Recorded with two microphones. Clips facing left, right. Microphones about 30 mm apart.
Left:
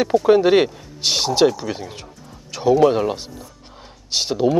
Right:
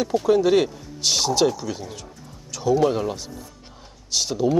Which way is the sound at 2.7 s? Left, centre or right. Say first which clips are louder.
Left 5 dB; centre.